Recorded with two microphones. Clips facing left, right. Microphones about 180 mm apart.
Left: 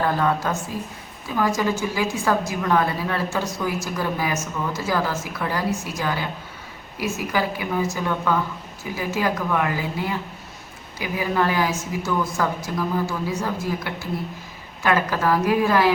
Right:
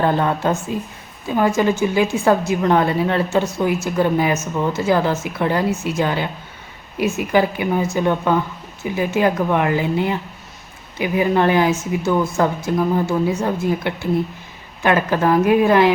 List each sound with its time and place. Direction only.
0.0 s a woman's voice: 25° right (ahead or behind)
2.0 s a woman's voice: 25° right (ahead or behind)